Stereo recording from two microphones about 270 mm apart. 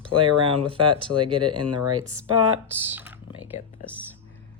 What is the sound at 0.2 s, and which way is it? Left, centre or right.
Speech, centre.